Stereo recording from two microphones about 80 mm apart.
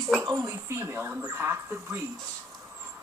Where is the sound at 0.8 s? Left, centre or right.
Right.